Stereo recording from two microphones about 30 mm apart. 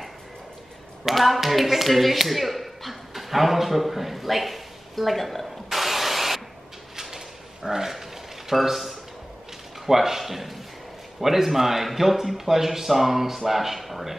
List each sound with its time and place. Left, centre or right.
1.0 s speech: centre
7.0 s a sound: centre
8.5 s a man's voice: centre